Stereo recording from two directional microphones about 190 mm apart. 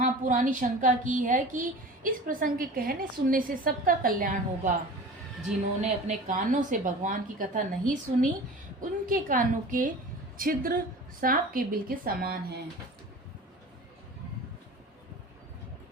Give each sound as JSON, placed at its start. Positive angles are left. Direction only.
{"t": 0.0, "sound": "a woman's voice", "side_deg": -45}
{"t": 5.8, "sound": "a woman's voice", "side_deg": -40}